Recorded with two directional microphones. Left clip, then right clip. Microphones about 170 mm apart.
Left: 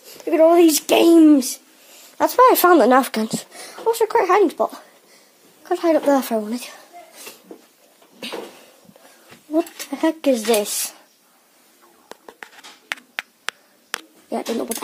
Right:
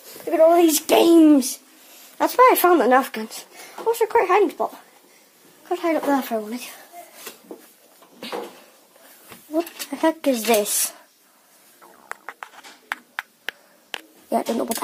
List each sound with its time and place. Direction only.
0.2 s speech: 30° left (ahead or behind)
2.1 s speech: 50° left (ahead or behind); by 3.4 s 70° left (ahead or behind)
3.8 s speech: 45° left (ahead or behind)
9.8 s speech: 25° left (ahead or behind)
12.8 s a sound: 35° left (ahead or behind)
14.3 s speech: centre (ahead or behind)